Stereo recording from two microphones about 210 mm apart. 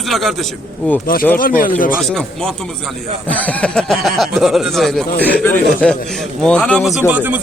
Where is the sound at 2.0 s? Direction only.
5° left (ahead or behind).